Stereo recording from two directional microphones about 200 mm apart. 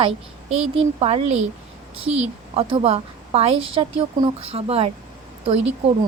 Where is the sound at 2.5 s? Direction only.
30° right (ahead or behind).